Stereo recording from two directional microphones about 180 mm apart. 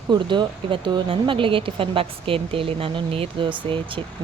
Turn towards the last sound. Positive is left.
turn(degrees=-30)  # may be behind; listen again after turning